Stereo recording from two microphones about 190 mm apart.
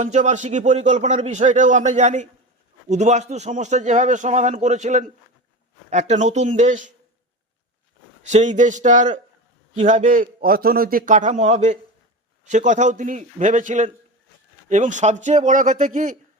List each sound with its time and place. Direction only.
0.0 s a man's voice: 40° right (ahead or behind)
8.2 s a man's voice: 40° right (ahead or behind)